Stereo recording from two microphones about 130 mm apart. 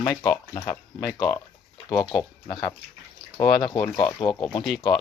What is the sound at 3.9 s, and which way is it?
Speech, 35° left (ahead or behind).